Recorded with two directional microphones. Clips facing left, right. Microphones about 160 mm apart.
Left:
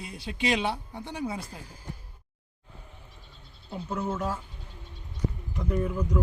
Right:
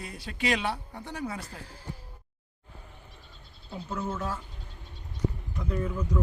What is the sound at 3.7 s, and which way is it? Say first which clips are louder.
Speech: left 2 dB; 10° left (ahead or behind).